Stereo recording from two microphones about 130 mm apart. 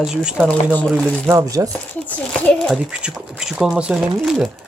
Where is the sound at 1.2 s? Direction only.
25° right (ahead or behind).